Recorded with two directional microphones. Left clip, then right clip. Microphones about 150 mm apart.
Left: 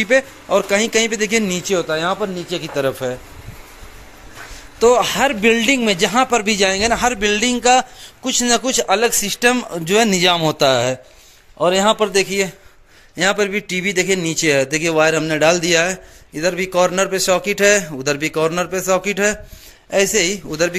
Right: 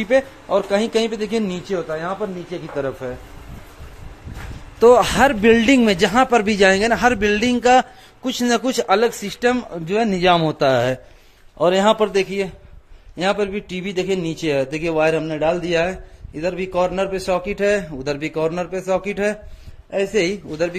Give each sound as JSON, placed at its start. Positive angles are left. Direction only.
{"t": 0.0, "sound": "speech", "side_deg": -5}
{"t": 1.6, "sound": "a man's voice", "side_deg": 20}
{"t": 4.7, "sound": "a man's voice", "side_deg": -30}
{"t": 8.8, "sound": "a man's voice", "side_deg": -10}